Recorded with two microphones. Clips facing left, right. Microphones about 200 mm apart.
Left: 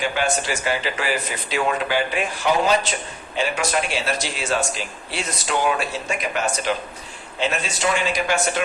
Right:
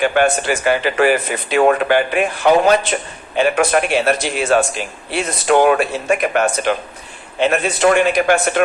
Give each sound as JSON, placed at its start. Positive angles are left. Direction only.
{"t": 0.0, "sound": "speech", "side_deg": -60}